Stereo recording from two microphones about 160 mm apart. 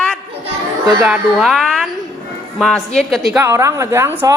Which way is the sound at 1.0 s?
Centre (ahead or behind).